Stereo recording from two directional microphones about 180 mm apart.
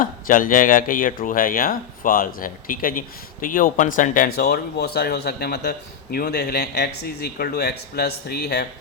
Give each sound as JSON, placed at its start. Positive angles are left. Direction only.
{"t": 0.0, "sound": "speech", "side_deg": 50}